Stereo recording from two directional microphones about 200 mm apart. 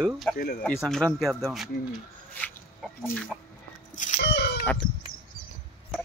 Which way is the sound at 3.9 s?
40° left (ahead or behind).